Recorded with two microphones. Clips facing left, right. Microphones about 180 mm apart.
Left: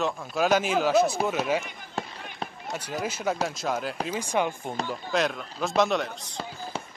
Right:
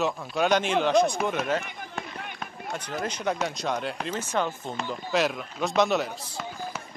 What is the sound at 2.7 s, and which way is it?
Speech, 10° left (ahead or behind).